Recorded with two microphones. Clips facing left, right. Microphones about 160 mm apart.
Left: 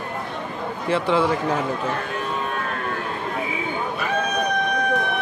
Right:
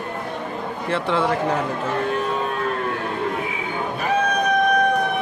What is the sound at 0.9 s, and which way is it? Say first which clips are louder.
Speech: left 1 dB; centre (ahead or behind).